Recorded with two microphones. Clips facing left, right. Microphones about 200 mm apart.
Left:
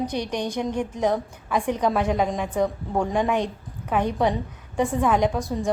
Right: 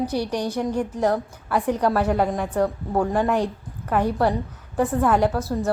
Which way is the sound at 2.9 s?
5° right (ahead or behind).